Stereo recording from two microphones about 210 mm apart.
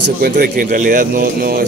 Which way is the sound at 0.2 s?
45° right (ahead or behind).